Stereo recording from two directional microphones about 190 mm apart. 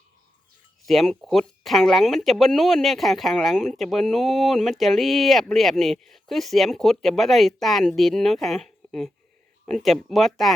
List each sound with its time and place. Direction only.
0.9 s speech: centre (ahead or behind)